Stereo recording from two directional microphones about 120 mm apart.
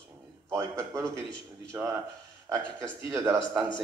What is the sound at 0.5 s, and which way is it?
Speech, 25° right (ahead or behind).